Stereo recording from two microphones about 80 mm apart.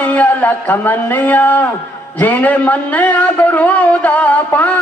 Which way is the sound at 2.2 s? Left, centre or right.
Left.